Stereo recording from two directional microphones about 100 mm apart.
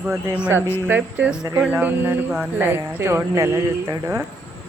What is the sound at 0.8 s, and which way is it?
Speech, 15° right (ahead or behind).